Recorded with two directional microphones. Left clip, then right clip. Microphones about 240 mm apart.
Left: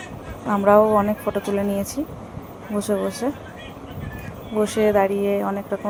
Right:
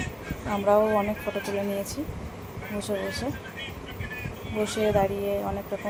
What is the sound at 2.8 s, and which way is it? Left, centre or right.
Speech, left.